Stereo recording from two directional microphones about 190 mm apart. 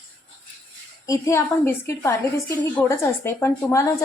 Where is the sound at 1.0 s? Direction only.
15° left (ahead or behind).